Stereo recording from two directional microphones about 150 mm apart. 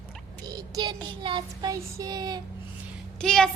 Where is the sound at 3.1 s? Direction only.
5° left (ahead or behind).